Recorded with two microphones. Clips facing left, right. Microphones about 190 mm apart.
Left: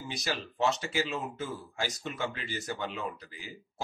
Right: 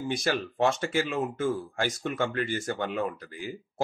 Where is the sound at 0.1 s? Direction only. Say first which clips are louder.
Right 6 dB; 55° right (ahead or behind).